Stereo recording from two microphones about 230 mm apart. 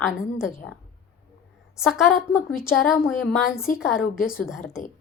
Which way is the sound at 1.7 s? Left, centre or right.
Centre.